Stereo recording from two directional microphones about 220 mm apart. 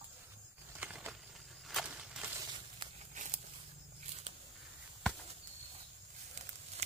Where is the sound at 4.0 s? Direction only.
30° right (ahead or behind).